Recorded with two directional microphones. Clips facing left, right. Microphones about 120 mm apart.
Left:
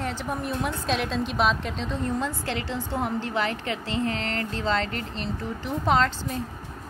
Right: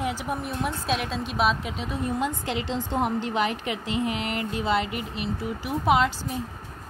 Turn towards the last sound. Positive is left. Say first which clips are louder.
# right 1 dB
turn(degrees=-10)  # may be behind; listen again after turning